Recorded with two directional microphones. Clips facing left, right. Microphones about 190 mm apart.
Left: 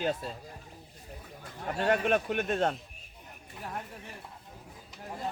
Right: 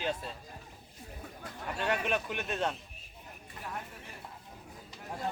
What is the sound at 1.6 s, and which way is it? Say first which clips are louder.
Speech: left 5 dB; 40° left (ahead or behind).